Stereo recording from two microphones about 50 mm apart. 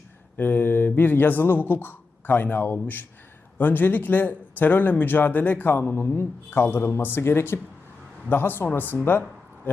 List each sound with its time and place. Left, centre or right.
0.3 s speech: left